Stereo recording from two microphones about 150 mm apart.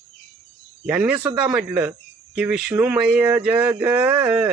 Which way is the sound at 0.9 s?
10° right (ahead or behind).